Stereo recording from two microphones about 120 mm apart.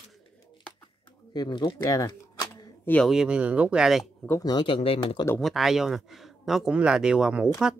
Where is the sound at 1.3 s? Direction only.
35° left (ahead or behind).